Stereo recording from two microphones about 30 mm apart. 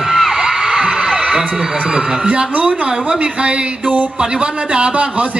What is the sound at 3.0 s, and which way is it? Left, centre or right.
A man's voice, right.